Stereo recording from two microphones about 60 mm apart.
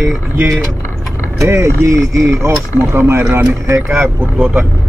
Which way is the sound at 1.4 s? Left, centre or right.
Right.